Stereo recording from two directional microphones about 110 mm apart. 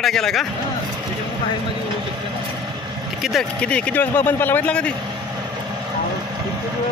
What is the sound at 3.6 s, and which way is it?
A man's voice, 10° left (ahead or behind).